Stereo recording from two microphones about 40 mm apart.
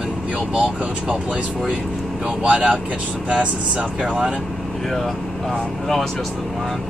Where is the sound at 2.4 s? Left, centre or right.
Right.